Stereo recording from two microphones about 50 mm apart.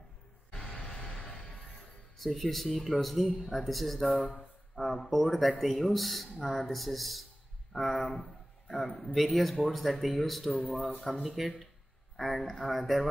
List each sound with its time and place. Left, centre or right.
0.5 s music: centre
2.1 s a man's voice: centre
10.8 s speech: centre
11.2 s a man's voice: centre